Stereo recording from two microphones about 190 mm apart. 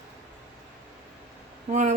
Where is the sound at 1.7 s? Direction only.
40° right (ahead or behind).